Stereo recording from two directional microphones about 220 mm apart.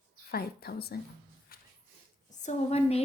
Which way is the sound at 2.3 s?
30° left (ahead or behind).